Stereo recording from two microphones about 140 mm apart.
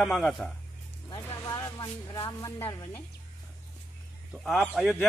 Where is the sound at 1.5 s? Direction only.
25° left (ahead or behind).